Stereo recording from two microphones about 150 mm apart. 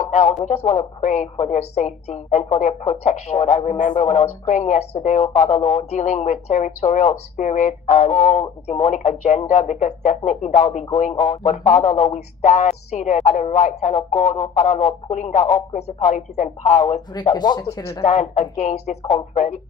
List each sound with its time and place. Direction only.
0.0 s a woman's voice: 50° left (ahead or behind)
17.1 s speech: 30° left (ahead or behind)
18.0 s a woman's voice: 50° left (ahead or behind)